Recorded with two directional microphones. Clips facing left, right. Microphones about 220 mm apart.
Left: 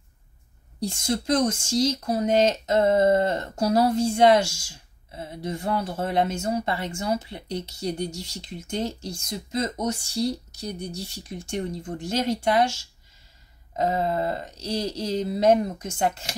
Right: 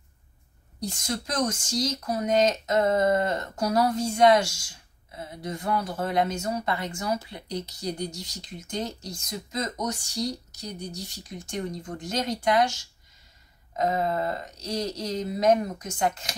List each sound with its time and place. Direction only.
0.7 s speech: 30° left (ahead or behind)